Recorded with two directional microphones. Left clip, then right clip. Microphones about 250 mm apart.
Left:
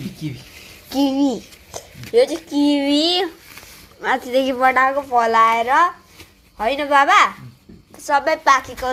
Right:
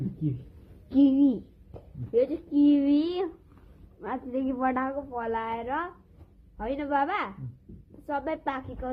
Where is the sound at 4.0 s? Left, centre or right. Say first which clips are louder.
Left 14 dB; centre.